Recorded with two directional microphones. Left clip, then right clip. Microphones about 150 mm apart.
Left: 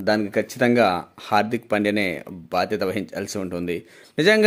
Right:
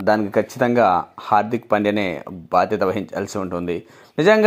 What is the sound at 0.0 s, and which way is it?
Speech, centre (ahead or behind).